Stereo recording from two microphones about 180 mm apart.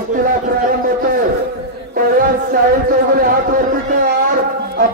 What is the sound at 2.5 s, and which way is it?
A man's voice, 55° right (ahead or behind).